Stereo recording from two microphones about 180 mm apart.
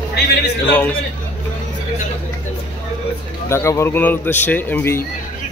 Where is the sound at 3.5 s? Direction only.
15° left (ahead or behind).